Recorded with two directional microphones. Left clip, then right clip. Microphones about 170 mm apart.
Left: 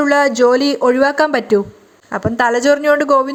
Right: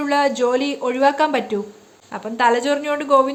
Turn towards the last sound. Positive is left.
turn(degrees=35)  # may be behind; listen again after turning